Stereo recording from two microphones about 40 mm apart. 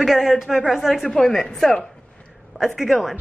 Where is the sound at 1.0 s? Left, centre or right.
Centre.